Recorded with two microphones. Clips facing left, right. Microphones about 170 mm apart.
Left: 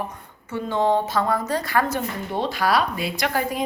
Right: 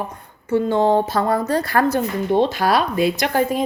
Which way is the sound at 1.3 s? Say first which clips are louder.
Right 5 dB; 60° right (ahead or behind).